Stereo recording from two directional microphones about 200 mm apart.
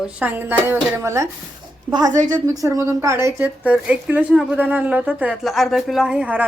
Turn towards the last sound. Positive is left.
turn(degrees=-5)  # may be behind; listen again after turning